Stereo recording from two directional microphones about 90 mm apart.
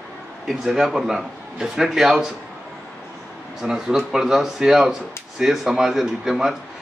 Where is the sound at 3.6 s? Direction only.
5° right (ahead or behind).